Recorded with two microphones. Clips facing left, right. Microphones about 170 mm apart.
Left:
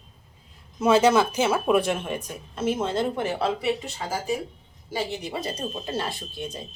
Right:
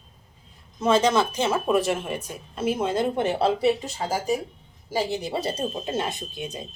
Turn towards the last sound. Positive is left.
turn(degrees=-15)  # may be behind; listen again after turning